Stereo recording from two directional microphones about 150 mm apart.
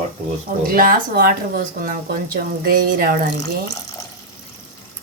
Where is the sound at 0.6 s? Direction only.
75° right (ahead or behind).